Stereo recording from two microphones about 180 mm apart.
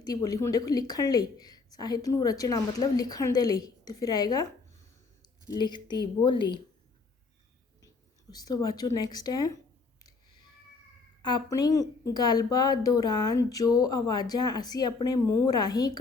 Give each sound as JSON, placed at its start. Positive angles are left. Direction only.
{"t": 0.0, "sound": "speech", "side_deg": 20}
{"t": 8.3, "sound": "speech", "side_deg": 20}
{"t": 11.2, "sound": "speech", "side_deg": 20}